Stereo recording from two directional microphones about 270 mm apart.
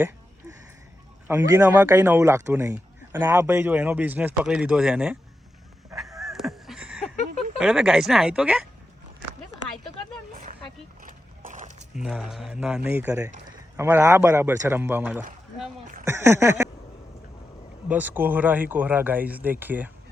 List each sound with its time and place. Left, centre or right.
1.3 s a man's voice: centre
6.1 s a sound: centre
7.3 s speech: centre
10.3 s vehicle: right
11.0 s horse: right
11.9 s a man's voice: centre
16.0 s a sound: centre
17.8 s a man's voice: centre